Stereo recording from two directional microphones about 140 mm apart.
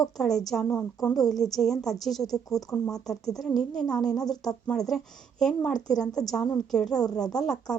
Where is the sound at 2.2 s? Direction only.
25° left (ahead or behind).